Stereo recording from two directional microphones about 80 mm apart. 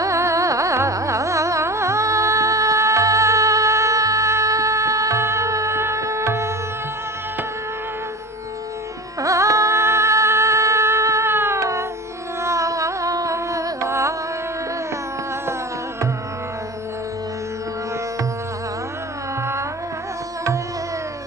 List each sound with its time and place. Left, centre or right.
0.0 s carnatic music: right
9.2 s music: right
12.4 s carnatic music: right